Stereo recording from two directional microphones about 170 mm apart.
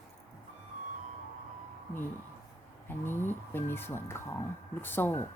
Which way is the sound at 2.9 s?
15° left (ahead or behind).